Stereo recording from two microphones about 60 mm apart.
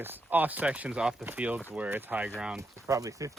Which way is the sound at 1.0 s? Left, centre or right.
Centre.